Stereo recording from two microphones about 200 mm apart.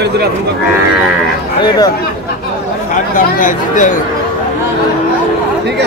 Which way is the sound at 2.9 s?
40° left (ahead or behind).